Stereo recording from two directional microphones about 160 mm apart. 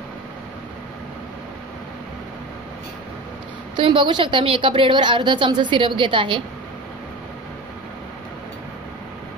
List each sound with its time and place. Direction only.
3.7 s a woman's voice: 30° right (ahead or behind)